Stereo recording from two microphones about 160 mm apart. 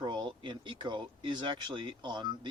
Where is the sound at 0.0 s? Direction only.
30° right (ahead or behind).